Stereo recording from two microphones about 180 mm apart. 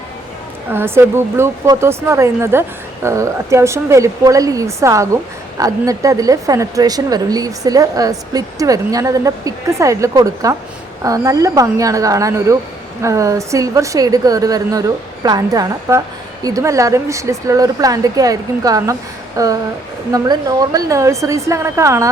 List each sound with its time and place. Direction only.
0.7 s a woman's voice: 15° right (ahead or behind)